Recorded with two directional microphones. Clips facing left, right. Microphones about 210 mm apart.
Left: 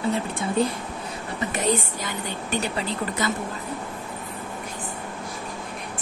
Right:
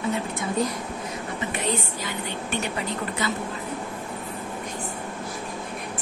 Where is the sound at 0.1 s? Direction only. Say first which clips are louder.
Left 2 dB; 30° left (ahead or behind).